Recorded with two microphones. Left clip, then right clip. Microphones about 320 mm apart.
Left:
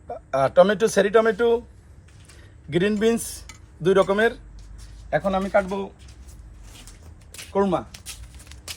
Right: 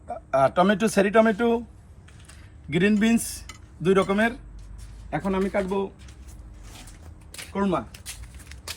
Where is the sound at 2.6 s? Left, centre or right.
Left.